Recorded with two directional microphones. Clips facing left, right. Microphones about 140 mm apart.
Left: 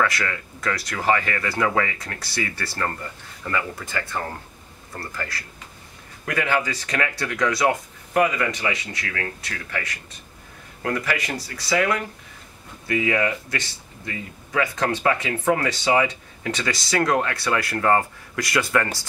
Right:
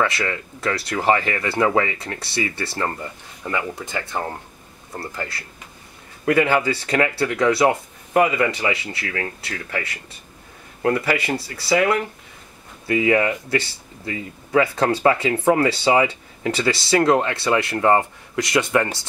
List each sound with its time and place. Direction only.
0.0 s speech: 25° right (ahead or behind)